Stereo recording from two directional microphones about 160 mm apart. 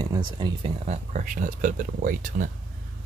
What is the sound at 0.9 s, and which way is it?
Speech, 55° right (ahead or behind).